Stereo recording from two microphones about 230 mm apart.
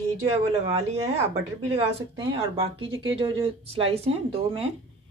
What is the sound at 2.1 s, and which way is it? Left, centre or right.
A woman's voice, right.